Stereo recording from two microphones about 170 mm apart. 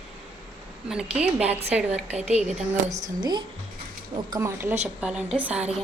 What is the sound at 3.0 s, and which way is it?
A woman's voice, 25° right (ahead or behind).